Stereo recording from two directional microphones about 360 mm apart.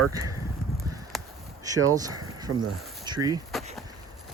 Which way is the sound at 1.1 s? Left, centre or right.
Centre.